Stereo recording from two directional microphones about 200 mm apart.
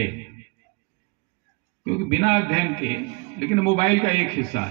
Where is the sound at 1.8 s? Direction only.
35° left (ahead or behind).